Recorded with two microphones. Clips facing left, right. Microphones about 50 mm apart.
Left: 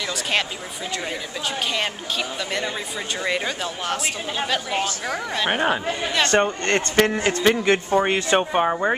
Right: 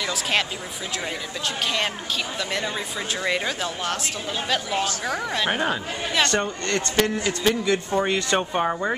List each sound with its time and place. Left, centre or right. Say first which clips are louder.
0.1 s a woman's voice: left 1 dB; centre
3.3 s a woman's voice: even; centre
5.5 s speech: left 5 dB; left
6.2 s a man's voice: left 4 dB; left
7.9 s speech: left 3 dB; left